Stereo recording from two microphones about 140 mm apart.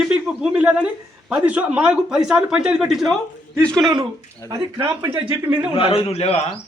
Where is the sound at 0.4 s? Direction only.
10° right (ahead or behind).